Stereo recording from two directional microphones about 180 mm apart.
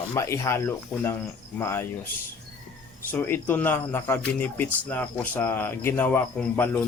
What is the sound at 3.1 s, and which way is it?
Speech, 10° left (ahead or behind).